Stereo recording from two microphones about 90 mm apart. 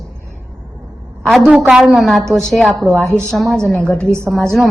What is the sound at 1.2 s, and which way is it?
A woman's voice, centre (ahead or behind).